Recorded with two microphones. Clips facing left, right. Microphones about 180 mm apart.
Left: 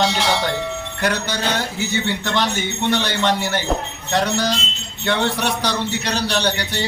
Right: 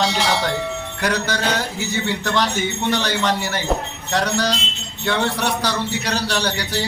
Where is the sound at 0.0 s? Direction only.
Centre (ahead or behind).